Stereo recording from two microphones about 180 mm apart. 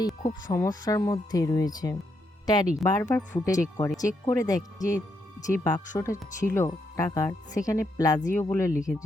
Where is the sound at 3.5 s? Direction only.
20° left (ahead or behind).